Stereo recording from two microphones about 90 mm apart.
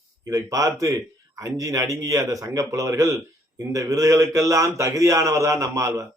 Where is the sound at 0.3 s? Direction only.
40° right (ahead or behind).